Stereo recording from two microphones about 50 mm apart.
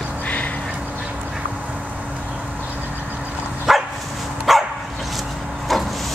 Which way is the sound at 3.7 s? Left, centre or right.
Centre.